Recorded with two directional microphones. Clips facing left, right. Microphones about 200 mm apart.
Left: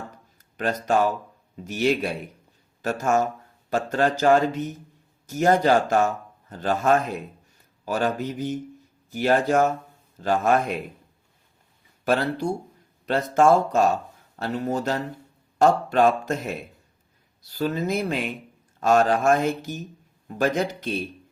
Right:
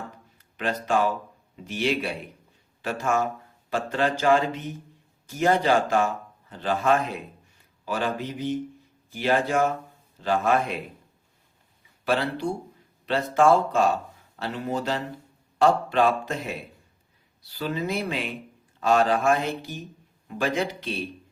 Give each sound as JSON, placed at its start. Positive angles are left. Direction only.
{"t": 0.3, "sound": "a man's voice", "side_deg": 40}
{"t": 12.0, "sound": "speech", "side_deg": 45}